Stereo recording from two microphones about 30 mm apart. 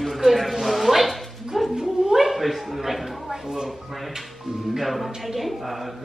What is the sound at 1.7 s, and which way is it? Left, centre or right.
Speech, right.